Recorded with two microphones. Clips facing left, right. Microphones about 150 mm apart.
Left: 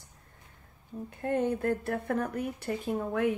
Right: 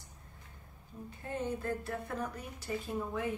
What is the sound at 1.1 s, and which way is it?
Speech, 60° left (ahead or behind).